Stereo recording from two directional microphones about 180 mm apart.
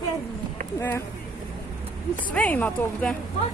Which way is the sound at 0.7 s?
10° left (ahead or behind).